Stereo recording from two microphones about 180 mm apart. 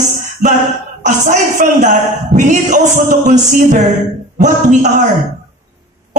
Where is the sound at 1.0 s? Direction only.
45° right (ahead or behind).